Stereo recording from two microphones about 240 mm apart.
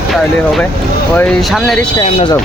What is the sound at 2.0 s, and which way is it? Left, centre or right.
Speech, left.